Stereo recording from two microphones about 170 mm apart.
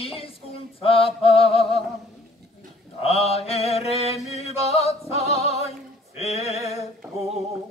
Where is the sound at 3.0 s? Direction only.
35° left (ahead or behind).